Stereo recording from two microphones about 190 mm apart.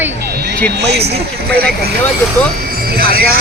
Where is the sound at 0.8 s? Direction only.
60° right (ahead or behind).